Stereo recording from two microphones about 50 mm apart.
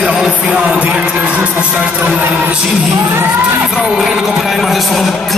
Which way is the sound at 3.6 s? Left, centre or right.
Centre.